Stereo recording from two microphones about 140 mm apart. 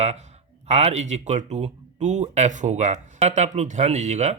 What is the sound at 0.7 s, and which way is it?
Speech, 50° right (ahead or behind).